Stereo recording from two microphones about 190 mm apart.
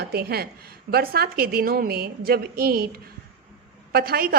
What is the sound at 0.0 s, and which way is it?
A woman's voice, 55° right (ahead or behind).